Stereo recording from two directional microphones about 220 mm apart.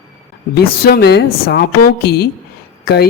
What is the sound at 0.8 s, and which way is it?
A woman's voice, 45° left (ahead or behind).